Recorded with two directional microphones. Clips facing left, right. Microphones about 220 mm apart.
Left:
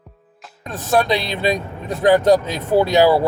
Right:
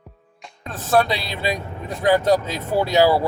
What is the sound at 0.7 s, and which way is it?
Speech, 15° left (ahead or behind).